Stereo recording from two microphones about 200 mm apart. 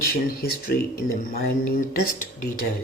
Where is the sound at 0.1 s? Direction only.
45° left (ahead or behind).